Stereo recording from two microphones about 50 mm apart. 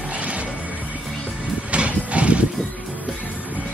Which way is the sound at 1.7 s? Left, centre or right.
Right.